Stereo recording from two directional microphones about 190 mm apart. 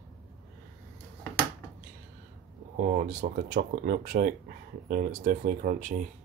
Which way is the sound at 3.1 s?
40° right (ahead or behind).